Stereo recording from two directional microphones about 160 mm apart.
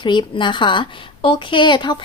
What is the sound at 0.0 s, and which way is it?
A woman's voice, 30° left (ahead or behind).